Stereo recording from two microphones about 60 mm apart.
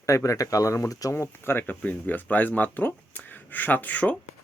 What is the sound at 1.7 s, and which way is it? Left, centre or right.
Speech, left.